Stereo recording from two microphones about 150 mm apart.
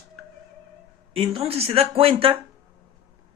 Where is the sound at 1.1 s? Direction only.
40° right (ahead or behind).